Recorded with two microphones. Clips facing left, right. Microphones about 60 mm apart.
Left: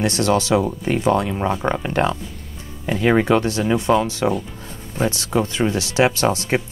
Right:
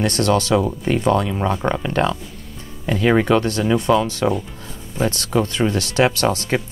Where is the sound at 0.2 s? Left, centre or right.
Centre.